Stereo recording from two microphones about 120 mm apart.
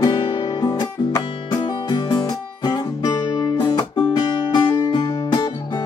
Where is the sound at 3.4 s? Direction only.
35° left (ahead or behind).